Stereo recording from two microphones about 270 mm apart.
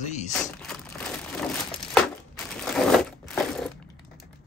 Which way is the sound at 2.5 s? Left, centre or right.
Centre.